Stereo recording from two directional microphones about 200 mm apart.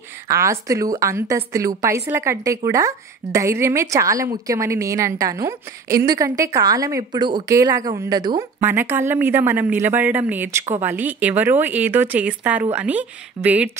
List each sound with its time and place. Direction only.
0.3 s a woman's voice: 15° right (ahead or behind)